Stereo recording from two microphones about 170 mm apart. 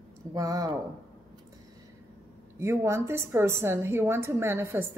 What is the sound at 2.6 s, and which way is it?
A woman's voice, 15° right (ahead or behind).